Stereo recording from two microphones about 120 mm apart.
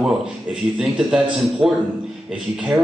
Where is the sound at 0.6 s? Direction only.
Centre (ahead or behind).